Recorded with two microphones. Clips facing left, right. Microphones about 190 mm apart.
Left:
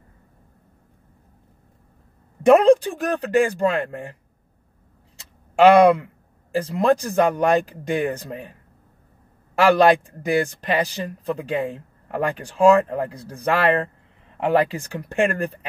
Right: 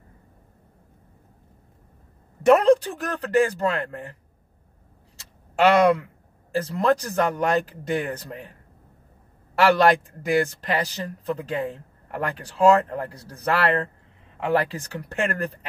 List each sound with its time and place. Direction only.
2.4 s speech: 15° left (ahead or behind)
5.6 s speech: 20° left (ahead or behind)
9.7 s speech: 15° left (ahead or behind)